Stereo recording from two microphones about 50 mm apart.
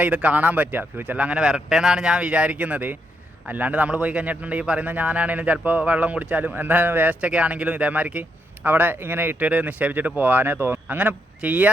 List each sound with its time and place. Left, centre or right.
0.0 s speech: right
1.4 s a man's voice: centre; by 8.2 s right
8.6 s speech: right
9.4 s speech: right
10.9 s a man's voice: right